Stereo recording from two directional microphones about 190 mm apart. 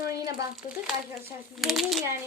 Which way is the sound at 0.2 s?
20° right (ahead or behind).